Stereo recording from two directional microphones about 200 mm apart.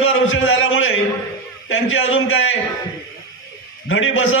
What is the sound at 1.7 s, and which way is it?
Speech, 80° left.